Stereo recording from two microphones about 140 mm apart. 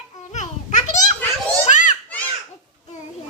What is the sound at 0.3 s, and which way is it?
Children playing, 60° left (ahead or behind).